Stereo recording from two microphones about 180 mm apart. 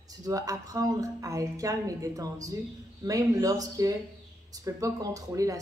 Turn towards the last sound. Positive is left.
turn(degrees=-20)  # may be behind; listen again after turning